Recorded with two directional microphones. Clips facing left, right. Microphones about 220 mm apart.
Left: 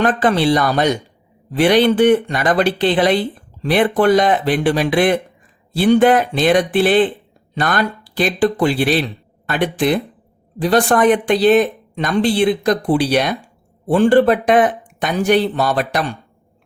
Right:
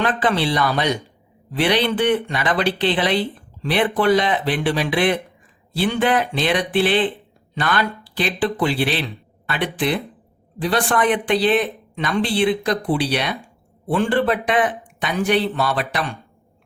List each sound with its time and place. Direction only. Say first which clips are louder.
0.0 s speech: left 5 dB; 45° left (ahead or behind)